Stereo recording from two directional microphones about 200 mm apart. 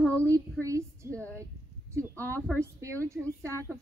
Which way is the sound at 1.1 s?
10° left (ahead or behind).